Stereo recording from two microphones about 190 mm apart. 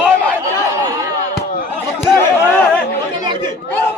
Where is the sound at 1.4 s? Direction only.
45° left (ahead or behind).